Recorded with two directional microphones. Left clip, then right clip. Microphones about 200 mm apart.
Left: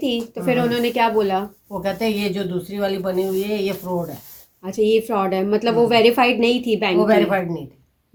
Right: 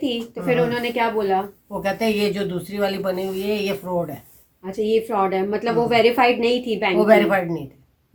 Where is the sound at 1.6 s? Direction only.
5° right (ahead or behind).